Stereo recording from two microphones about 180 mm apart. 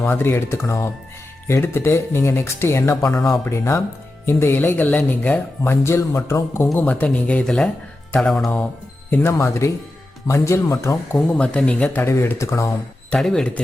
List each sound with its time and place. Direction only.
0.0 s speech: 15° left (ahead or behind)
13.1 s speech: 5° left (ahead or behind)